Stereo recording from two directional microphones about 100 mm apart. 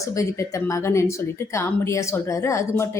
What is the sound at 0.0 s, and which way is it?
A woman's voice, 35° left (ahead or behind).